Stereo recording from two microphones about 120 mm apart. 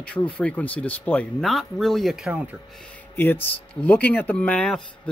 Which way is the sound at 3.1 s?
15° left (ahead or behind).